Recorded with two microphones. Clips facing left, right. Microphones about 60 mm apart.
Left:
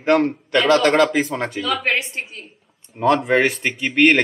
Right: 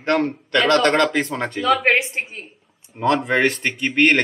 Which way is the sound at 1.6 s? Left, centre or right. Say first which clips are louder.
Right 6 dB; right.